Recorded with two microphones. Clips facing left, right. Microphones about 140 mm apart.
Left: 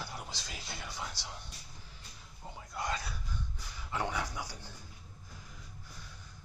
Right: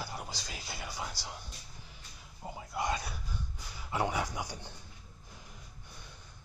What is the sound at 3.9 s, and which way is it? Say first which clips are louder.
Speech: right 3 dB; 10° right (ahead or behind).